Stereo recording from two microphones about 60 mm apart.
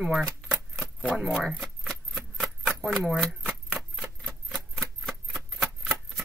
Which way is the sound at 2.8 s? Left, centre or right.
Centre.